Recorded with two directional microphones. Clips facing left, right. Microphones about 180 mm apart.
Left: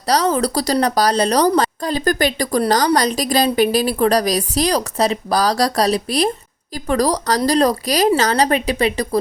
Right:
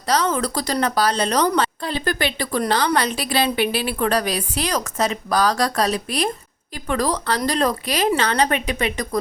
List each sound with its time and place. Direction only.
0.0 s a woman's voice: 35° left (ahead or behind)